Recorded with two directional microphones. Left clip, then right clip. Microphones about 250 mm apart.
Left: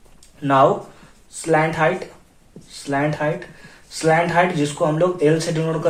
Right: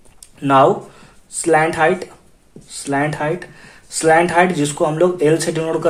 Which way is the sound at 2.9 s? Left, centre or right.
Right.